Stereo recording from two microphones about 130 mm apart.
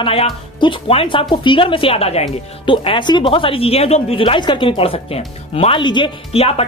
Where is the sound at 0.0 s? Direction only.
45° left (ahead or behind).